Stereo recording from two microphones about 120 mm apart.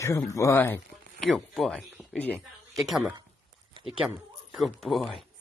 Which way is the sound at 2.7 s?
Centre (ahead or behind).